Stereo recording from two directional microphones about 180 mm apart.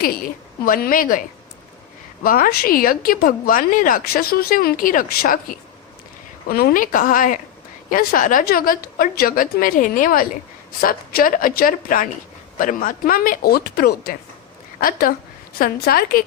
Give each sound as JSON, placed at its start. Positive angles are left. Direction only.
{"t": 0.0, "sound": "a woman's voice", "side_deg": 55}
{"t": 2.2, "sound": "a woman's voice", "side_deg": 55}